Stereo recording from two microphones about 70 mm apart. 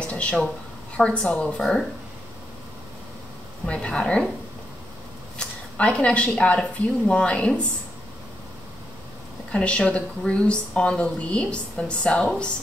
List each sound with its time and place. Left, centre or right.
0.0 s speech: centre
3.6 s speech: centre
5.4 s speech: centre
9.5 s speech: centre